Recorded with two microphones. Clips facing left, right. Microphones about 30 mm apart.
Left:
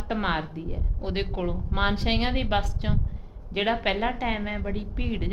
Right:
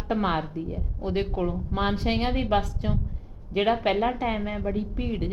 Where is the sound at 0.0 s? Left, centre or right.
Centre.